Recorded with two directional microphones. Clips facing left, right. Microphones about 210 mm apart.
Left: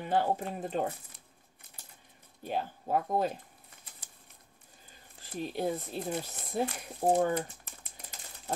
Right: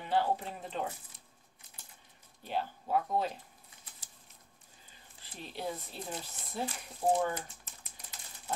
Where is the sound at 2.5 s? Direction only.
45° left (ahead or behind).